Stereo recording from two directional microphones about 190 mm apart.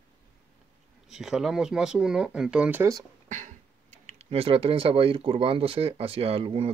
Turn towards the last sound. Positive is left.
turn(degrees=-30)  # may be behind; listen again after turning